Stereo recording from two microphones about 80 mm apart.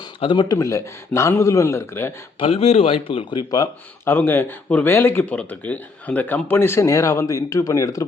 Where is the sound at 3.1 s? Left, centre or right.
Left.